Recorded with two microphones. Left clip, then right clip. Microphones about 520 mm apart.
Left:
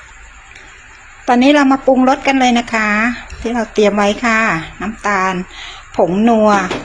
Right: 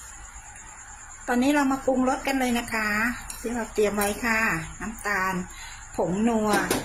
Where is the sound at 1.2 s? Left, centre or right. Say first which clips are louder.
Left 13 dB; right.